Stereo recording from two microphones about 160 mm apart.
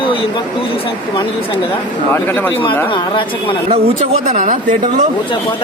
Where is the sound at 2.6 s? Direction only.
30° left (ahead or behind).